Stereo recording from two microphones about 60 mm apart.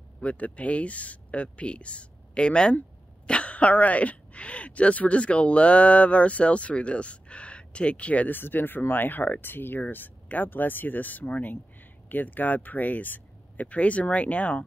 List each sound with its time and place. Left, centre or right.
0.2 s speech: left